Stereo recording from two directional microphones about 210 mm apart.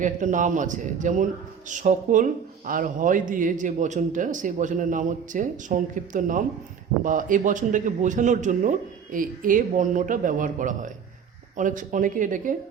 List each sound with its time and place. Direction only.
0.0 s speech: 35° right (ahead or behind)